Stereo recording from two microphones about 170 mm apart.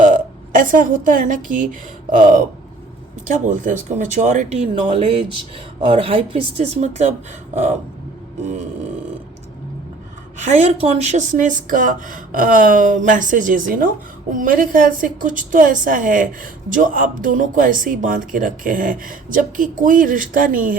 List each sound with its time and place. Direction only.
0.5 s speech: 50° right (ahead or behind)
3.4 s speech: 50° right (ahead or behind)
4.7 s speech: 35° right (ahead or behind)
8.4 s speech: 40° right (ahead or behind)
10.6 s speech: 40° right (ahead or behind)